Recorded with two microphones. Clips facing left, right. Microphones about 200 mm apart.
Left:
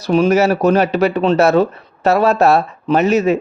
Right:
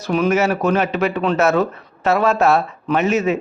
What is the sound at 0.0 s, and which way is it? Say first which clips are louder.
Speech: left 4 dB; 30° left (ahead or behind).